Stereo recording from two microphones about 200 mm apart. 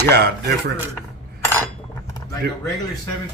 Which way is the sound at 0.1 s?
55° right (ahead or behind).